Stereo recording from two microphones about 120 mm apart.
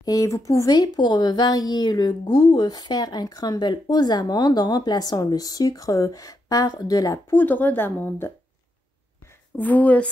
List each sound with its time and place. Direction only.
0.0 s a woman's voice: 30° left (ahead or behind)
7.3 s a woman's voice: 15° left (ahead or behind)
9.6 s a woman's voice: 15° left (ahead or behind)